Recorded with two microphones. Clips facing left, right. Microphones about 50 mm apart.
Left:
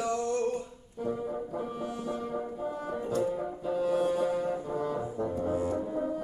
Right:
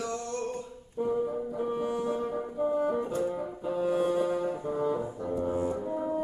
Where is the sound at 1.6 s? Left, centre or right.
Centre.